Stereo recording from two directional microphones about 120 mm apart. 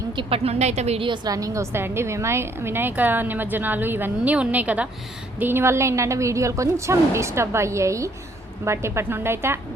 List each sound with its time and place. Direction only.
0.2 s a woman's voice: 55° right (ahead or behind)
1.0 s a woman's voice: 40° right (ahead or behind); by 9.6 s 20° right (ahead or behind)